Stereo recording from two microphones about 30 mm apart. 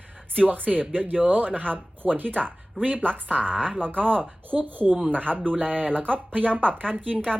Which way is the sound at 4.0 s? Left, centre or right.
Right.